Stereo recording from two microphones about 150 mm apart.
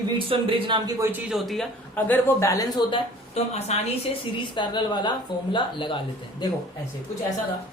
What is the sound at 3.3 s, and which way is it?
Speech, 45° left (ahead or behind).